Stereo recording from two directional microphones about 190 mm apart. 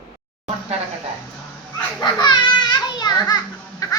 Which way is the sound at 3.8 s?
20° left (ahead or behind).